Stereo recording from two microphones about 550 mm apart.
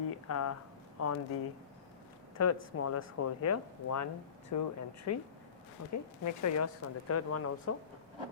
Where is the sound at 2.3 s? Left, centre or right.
Left.